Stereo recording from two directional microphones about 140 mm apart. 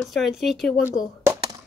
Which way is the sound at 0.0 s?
Centre (ahead or behind).